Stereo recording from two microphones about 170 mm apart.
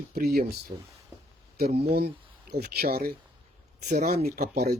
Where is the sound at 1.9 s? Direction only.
65° right (ahead or behind).